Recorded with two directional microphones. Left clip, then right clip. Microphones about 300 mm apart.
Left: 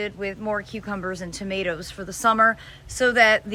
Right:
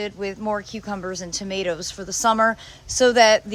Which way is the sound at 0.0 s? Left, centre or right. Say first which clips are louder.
Right 1 dB; centre.